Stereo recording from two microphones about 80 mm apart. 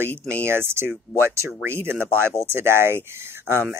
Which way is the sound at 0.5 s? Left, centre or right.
Right.